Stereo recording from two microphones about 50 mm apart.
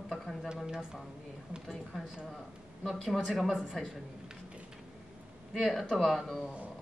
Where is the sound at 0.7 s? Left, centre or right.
Centre.